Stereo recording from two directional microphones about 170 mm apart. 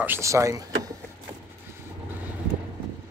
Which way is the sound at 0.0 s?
15° right (ahead or behind).